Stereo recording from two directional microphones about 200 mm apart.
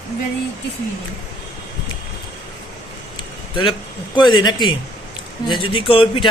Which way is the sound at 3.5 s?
25° left (ahead or behind).